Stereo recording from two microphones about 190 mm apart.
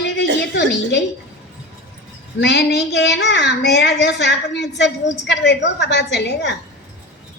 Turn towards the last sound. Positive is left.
turn(degrees=65)  # may be behind; listen again after turning